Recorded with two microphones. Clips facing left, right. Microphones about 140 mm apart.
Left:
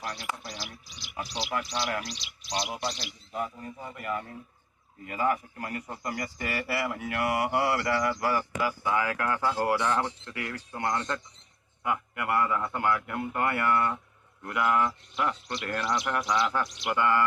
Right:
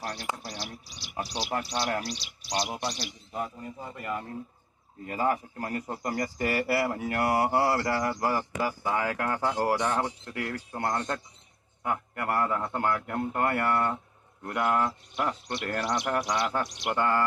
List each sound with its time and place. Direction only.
0.0 s a man's voice: 35° right (ahead or behind)
9.4 s speech: 20° right (ahead or behind)
10.3 s a man's voice: 40° right (ahead or behind)